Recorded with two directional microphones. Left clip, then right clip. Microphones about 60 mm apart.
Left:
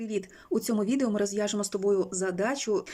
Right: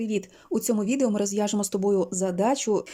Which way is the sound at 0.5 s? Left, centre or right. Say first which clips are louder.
Right 2 dB; centre.